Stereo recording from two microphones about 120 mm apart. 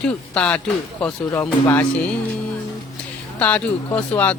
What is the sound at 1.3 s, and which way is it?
Speech, 25° left (ahead or behind).